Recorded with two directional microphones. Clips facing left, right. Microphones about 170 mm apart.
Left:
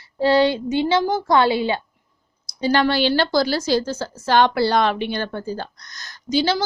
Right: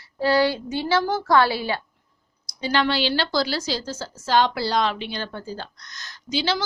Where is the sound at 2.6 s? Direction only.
45° left (ahead or behind).